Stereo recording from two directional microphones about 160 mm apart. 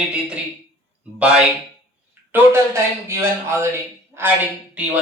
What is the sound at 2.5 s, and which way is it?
Speech, 15° right (ahead or behind).